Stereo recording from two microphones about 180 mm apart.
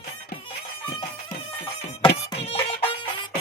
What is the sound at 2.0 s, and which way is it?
Music, 30° left (ahead or behind).